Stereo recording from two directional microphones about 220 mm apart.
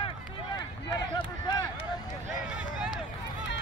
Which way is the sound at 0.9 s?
20° left (ahead or behind).